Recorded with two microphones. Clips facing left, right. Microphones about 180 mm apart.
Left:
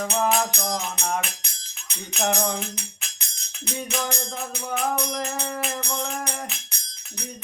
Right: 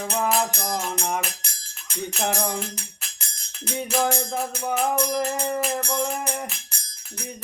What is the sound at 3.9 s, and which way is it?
Music, 45° right (ahead or behind).